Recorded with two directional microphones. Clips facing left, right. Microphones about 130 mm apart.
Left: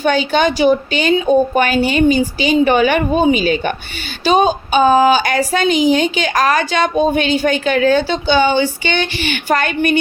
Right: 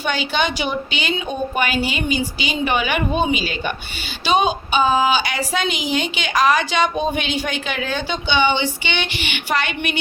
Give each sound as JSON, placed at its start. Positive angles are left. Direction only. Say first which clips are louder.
{"t": 0.0, "sound": "a woman's voice", "louder": "left 7 dB", "side_deg": 45}